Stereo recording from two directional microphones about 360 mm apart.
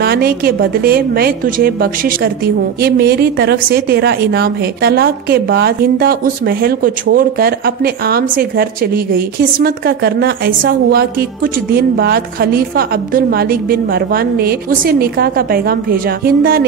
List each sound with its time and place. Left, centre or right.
0.0 s a woman's voice: right